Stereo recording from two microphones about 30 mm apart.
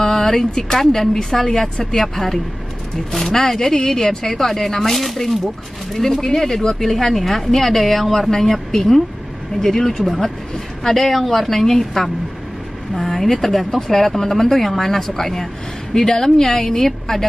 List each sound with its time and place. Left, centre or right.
0.0 s a woman's voice: centre
11.5 s a woman's voice: centre